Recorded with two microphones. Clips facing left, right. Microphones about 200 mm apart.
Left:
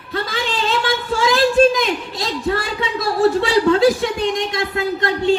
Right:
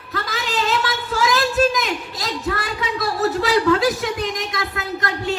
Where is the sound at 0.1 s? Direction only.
30° left (ahead or behind).